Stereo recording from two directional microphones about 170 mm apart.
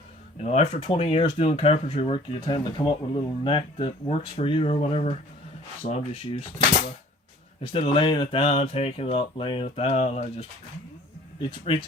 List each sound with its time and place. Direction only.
0.4 s speech: 40° left (ahead or behind)
7.6 s speech: 30° left (ahead or behind)